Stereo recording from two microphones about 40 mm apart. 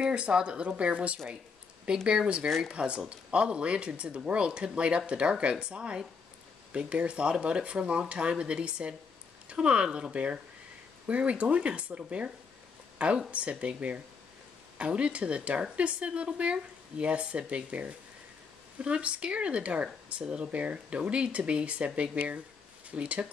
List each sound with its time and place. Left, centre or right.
0.0 s speech: right
13.3 s speech: right